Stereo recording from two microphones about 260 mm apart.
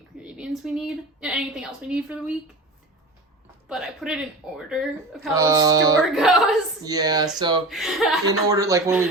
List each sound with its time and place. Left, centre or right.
0.2 s a woman's voice: centre
3.7 s speech: centre
5.3 s speech: centre
6.1 s speech: centre
6.8 s speech: centre
7.7 s speech: centre
8.3 s speech: centre